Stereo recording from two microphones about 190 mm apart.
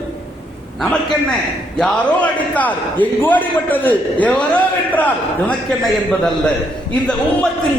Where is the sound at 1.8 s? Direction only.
5° left (ahead or behind).